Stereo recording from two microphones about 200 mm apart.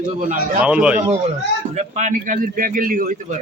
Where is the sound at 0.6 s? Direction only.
5° right (ahead or behind).